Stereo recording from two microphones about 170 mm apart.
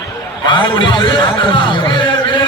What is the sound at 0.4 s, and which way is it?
A man's voice, 30° left (ahead or behind).